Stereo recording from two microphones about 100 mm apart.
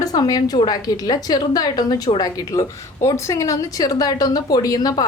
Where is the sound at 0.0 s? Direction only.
40° left (ahead or behind).